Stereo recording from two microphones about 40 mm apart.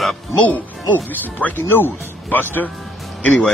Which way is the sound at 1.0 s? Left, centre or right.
Left.